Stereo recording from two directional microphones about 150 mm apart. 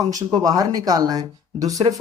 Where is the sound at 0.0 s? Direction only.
25° right (ahead or behind).